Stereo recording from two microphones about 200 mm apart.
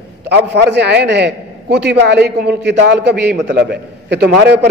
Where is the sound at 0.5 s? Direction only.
60° right (ahead or behind).